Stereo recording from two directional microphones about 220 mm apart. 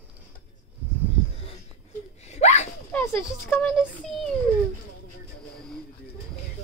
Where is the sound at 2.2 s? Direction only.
30° left (ahead or behind).